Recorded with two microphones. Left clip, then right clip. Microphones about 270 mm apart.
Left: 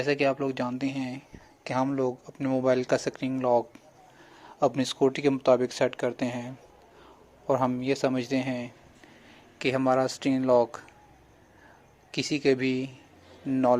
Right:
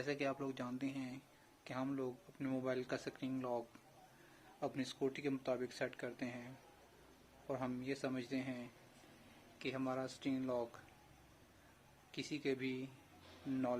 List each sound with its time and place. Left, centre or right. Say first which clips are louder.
0.0 s speech: left 16 dB; centre
4.6 s speech: left 17 dB; left
7.4 s speech: left 18 dB; left
12.1 s speech: left 17 dB; left